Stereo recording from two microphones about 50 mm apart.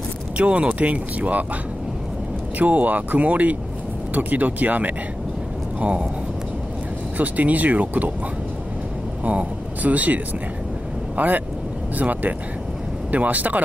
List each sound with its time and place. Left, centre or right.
0.4 s speech: right
2.6 s speech: right
7.2 s speech: right
9.2 s speech: right